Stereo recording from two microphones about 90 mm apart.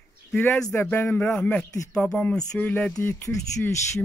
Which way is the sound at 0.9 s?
15° left (ahead or behind).